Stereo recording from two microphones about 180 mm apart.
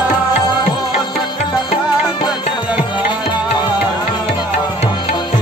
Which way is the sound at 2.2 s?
25° left (ahead or behind).